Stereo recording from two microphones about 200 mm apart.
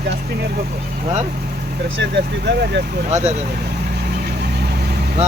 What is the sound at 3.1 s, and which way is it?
Speech, 35° right (ahead or behind).